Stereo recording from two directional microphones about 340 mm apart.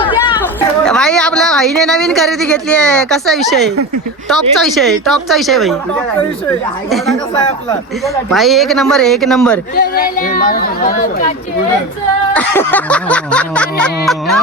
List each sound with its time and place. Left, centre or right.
0.0 s chatter: centre
0.9 s speech: centre
6.9 s speech: centre
9.7 s speech: left
12.3 s speech: centre